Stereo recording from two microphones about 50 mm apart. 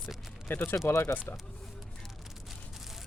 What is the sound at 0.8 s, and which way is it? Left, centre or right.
Speech, left.